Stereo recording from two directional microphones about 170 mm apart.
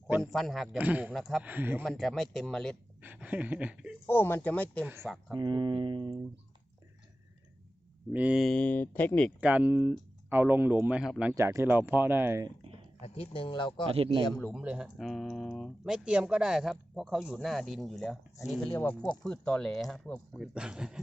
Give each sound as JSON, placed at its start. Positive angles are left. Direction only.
{"t": 0.2, "sound": "speech", "side_deg": 0}
{"t": 1.8, "sound": "speech", "side_deg": 0}
{"t": 3.0, "sound": "speech", "side_deg": -10}
{"t": 4.0, "sound": "speech", "side_deg": 10}
{"t": 5.3, "sound": "speech", "side_deg": -25}
{"t": 8.1, "sound": "speech", "side_deg": -5}
{"t": 9.4, "sound": "speech", "side_deg": -10}
{"t": 13.0, "sound": "speech", "side_deg": 35}
{"t": 13.9, "sound": "a man's voice", "side_deg": -30}
{"t": 14.3, "sound": "speech", "side_deg": 0}
{"t": 18.7, "sound": "speech", "side_deg": 15}
{"t": 19.0, "sound": "speech", "side_deg": 5}